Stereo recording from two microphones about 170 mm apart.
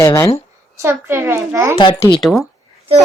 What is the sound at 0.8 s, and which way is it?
Speech, 15° right (ahead or behind).